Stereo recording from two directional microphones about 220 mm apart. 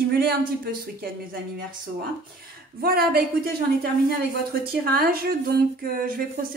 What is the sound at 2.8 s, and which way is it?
Speech, 45° right (ahead or behind).